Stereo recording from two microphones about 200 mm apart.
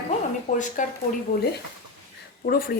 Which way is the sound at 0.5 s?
35° left (ahead or behind).